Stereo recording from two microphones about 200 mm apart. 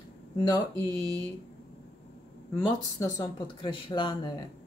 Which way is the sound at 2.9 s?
20° left (ahead or behind).